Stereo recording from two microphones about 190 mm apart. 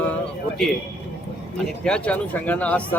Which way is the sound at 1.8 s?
5° left (ahead or behind).